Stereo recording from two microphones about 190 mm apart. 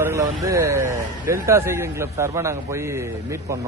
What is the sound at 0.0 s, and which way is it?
Speech, 15° right (ahead or behind).